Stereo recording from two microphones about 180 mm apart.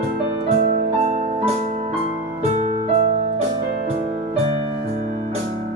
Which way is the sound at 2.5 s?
30° right (ahead or behind).